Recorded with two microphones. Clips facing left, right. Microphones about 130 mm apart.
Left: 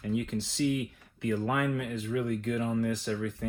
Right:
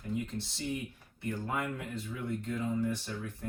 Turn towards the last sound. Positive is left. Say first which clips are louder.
# left 8 dB
turn(degrees=90)